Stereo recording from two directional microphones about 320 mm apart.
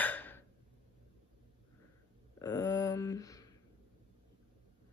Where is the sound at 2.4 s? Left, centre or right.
Centre.